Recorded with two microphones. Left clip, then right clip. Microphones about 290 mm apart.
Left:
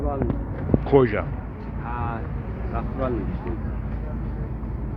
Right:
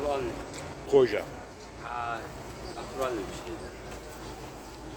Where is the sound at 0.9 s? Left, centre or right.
Right.